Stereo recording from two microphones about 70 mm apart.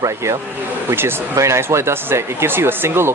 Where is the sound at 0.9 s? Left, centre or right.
Right.